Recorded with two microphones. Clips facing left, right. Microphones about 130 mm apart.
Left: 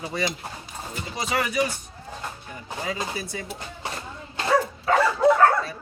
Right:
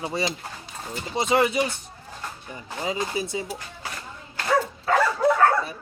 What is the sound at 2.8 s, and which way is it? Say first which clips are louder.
Speech: right 4 dB; 20° right (ahead or behind).